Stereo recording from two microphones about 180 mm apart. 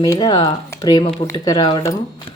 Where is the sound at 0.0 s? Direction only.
20° left (ahead or behind).